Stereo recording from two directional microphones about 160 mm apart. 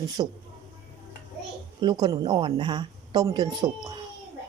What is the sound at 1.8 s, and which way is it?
Speech, 30° right (ahead or behind).